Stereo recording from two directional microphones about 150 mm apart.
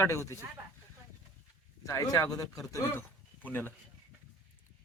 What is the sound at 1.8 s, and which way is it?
Speech, 20° left (ahead or behind).